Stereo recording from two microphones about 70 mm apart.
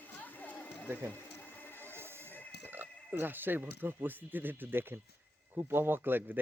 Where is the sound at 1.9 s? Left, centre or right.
Right.